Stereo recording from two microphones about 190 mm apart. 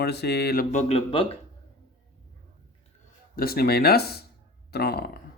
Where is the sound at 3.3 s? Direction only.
55° left (ahead or behind).